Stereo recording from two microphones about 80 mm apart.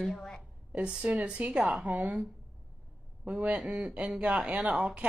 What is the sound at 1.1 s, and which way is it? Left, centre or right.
A woman's voice, centre.